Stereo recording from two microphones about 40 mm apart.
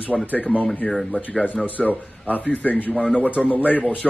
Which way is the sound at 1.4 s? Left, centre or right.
Left.